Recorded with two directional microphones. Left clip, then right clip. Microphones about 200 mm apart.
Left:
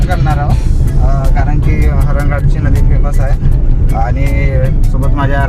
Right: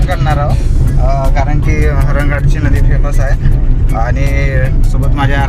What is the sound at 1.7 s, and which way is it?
Music, centre (ahead or behind).